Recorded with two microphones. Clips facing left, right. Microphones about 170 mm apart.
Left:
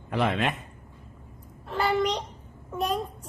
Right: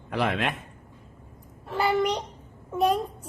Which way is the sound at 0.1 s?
Centre (ahead or behind).